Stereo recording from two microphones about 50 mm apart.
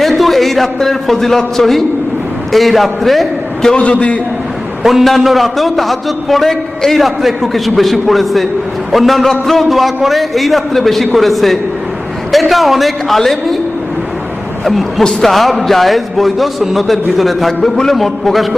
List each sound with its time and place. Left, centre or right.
0.0 s a man's voice: centre
3.7 s a man's voice: left
4.8 s a man's voice: centre
14.6 s a man's voice: centre